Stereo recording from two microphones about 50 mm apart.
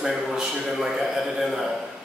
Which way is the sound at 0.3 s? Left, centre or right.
Centre.